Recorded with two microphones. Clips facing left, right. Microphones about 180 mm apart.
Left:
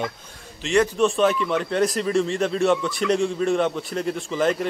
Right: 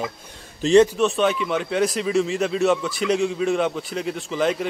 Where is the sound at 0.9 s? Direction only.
Centre (ahead or behind).